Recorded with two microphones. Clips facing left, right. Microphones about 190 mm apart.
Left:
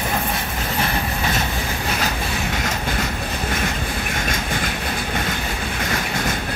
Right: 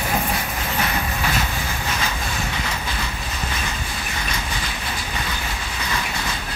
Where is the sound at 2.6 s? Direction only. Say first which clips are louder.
Left 4 dB; 50° left (ahead or behind).